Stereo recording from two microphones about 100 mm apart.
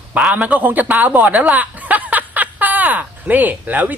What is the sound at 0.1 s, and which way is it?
A man's voice, 15° right (ahead or behind).